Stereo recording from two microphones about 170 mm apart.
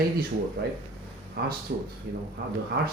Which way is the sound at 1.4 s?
65° right (ahead or behind).